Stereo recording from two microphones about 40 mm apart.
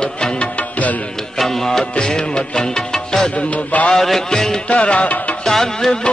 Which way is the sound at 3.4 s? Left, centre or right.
Left.